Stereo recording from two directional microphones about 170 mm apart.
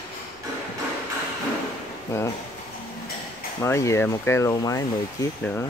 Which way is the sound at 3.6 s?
15° left (ahead or behind).